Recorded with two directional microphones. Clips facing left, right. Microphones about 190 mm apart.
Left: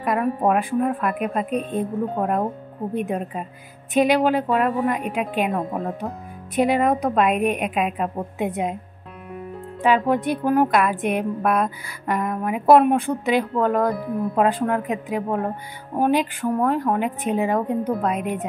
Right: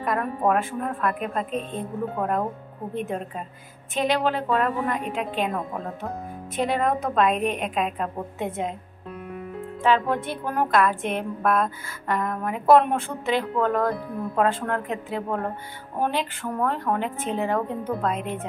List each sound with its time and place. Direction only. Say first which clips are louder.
0.0 s a woman's voice: left 3 dB; 15° left (ahead or behind)
3.9 s a woman's voice: left 6 dB; 15° left (ahead or behind)
9.8 s a woman's voice: left 3 dB; 15° left (ahead or behind)